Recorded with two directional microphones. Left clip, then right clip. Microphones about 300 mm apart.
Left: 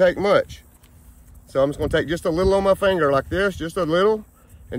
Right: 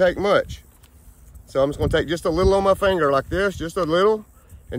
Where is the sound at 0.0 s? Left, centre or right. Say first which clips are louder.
Left 1 dB; centre.